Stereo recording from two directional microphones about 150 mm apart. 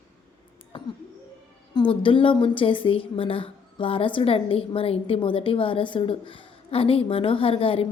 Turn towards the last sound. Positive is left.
turn(degrees=40)  # may be behind; listen again after turning